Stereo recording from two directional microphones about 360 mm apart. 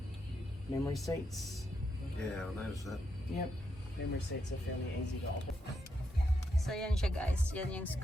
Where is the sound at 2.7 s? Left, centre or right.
Centre.